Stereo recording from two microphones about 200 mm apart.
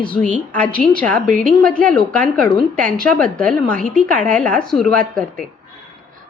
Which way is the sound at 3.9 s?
40° right (ahead or behind).